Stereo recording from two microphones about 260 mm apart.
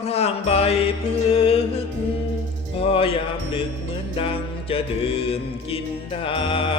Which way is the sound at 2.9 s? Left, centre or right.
Left.